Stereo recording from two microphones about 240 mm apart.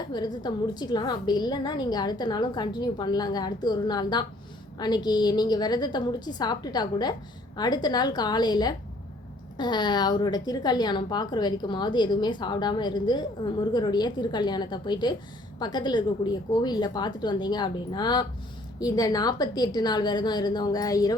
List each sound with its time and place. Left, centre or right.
0.1 s a woman's voice: centre